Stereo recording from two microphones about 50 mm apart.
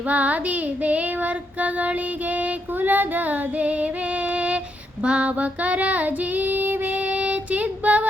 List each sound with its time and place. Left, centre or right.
0.1 s child singing: right
4.3 s a sound: right
5.0 s female singing: right